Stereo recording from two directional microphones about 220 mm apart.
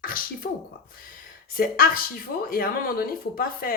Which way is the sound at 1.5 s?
40° left (ahead or behind).